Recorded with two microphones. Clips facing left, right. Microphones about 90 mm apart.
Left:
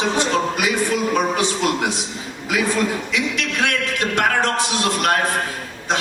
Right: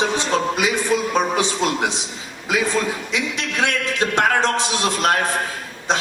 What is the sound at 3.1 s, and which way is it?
A man's voice, 20° right (ahead or behind).